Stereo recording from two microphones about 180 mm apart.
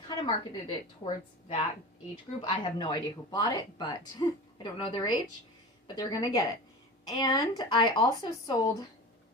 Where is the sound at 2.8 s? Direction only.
25° left (ahead or behind).